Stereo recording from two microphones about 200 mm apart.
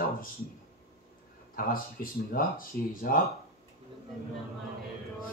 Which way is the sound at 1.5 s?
45° left (ahead or behind).